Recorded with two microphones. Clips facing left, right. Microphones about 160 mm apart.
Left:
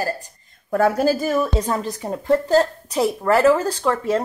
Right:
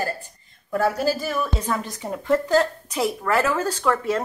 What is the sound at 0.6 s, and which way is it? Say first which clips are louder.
Speech: left 4 dB; 50° left (ahead or behind).